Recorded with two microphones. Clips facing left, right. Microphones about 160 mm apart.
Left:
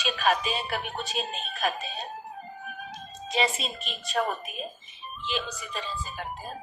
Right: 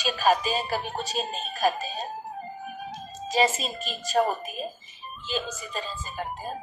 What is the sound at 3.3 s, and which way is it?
A woman's voice, 40° right (ahead or behind).